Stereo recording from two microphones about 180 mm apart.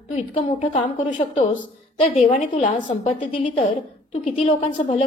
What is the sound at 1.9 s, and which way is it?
A woman's voice, 35° left (ahead or behind).